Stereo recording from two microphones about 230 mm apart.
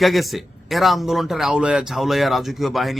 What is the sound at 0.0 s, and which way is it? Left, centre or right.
Speech, centre.